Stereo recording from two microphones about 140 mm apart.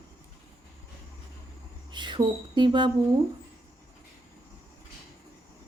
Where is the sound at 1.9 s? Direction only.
35° right (ahead or behind).